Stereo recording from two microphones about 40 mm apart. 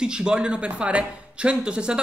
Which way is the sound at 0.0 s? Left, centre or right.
Right.